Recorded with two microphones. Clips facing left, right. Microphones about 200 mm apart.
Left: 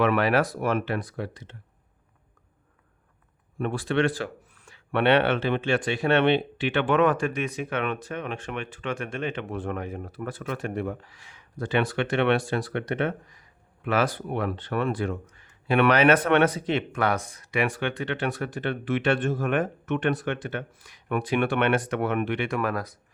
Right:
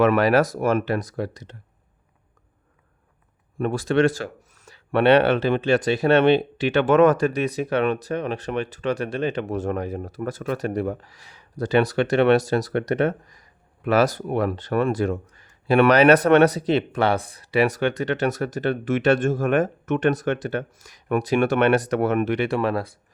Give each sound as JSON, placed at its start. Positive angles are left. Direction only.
{"t": 0.0, "sound": "speech", "side_deg": -40}
{"t": 3.6, "sound": "speech", "side_deg": -40}